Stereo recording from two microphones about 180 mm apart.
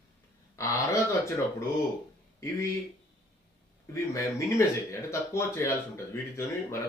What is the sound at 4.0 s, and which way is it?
Speech, 15° left (ahead or behind).